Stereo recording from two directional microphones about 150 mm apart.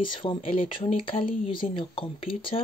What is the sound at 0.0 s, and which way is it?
Speech, 35° left (ahead or behind).